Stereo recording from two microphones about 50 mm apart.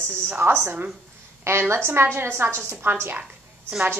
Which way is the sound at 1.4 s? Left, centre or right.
Right.